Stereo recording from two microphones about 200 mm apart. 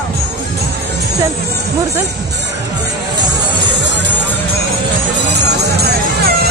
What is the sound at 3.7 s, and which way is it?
Music, 60° right (ahead or behind).